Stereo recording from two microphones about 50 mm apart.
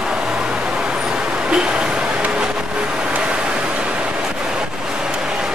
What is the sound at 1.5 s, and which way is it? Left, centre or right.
Vehicle, centre.